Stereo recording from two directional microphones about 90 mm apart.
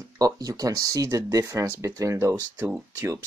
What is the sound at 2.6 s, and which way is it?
Speech, 25° right (ahead or behind).